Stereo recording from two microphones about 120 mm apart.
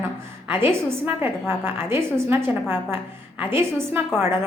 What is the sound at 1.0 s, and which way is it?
A woman's voice, 20° right (ahead or behind).